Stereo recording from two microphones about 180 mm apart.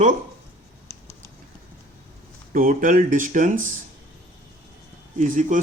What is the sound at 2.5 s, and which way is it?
Speech, 50° right (ahead or behind).